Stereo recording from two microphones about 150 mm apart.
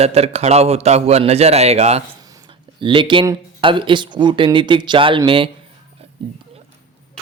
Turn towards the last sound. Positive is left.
turn(degrees=-35)  # may be behind; listen again after turning